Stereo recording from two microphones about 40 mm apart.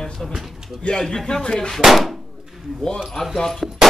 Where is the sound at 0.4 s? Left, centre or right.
Centre.